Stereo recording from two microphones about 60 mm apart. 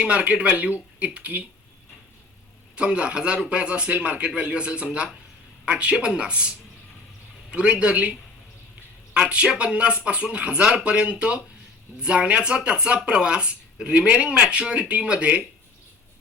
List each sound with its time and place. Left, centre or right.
0.0 s speech: centre
2.7 s speech: centre
7.5 s speech: centre